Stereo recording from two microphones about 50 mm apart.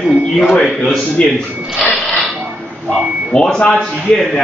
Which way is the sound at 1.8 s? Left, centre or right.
Left.